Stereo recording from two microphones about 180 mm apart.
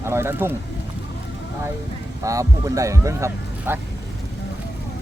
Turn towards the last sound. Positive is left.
turn(degrees=-15)  # may be behind; listen again after turning